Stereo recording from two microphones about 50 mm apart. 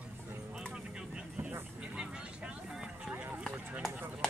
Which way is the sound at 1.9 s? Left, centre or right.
Centre.